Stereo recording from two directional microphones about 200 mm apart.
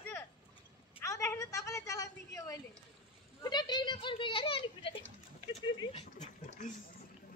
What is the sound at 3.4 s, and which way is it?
Speech, 20° left (ahead or behind).